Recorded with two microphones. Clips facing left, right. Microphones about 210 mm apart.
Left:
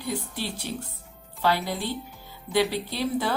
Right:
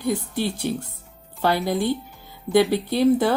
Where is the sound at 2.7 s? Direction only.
50° right (ahead or behind).